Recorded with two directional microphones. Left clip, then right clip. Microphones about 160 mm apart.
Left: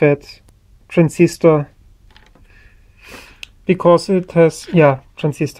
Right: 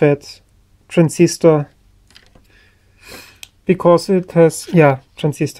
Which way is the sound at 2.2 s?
10° right (ahead or behind).